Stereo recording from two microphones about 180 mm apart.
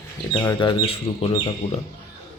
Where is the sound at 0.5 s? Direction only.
30° left (ahead or behind).